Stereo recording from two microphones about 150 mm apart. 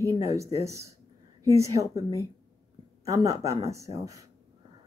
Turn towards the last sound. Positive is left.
turn(degrees=-20)  # may be behind; listen again after turning